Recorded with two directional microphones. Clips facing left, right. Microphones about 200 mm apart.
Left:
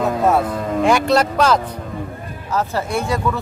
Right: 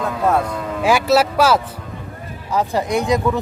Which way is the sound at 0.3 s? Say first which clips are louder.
Right 2 dB; centre (ahead or behind).